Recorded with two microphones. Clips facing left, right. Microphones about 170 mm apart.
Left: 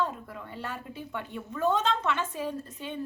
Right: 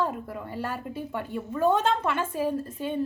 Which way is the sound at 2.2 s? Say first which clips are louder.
Right 6 dB; 50° right (ahead or behind).